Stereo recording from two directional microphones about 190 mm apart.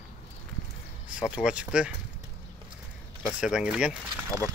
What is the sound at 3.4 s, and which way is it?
Speech, 5° right (ahead or behind).